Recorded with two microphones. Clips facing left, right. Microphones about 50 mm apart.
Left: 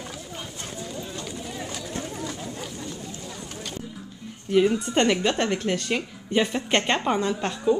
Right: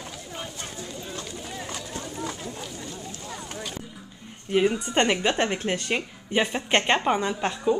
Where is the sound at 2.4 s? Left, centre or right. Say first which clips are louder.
Left 1 dB; centre.